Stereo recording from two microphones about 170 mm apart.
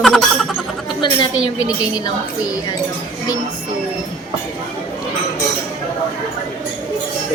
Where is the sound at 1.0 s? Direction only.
25° left (ahead or behind).